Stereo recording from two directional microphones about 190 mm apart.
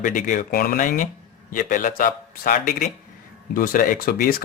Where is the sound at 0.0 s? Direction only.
45° left (ahead or behind).